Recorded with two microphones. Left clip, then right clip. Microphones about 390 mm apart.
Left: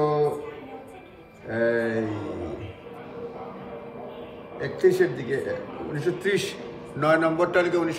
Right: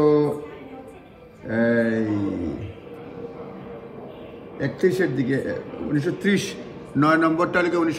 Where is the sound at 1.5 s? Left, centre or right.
Centre.